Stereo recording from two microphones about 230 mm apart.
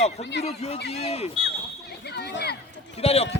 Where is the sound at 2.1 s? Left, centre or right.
Left.